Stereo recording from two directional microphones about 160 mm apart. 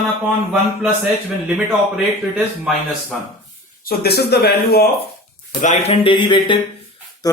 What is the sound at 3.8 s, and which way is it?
Speech, 80° left.